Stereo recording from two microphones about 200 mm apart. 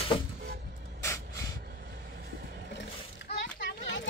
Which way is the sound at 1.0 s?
15° left (ahead or behind).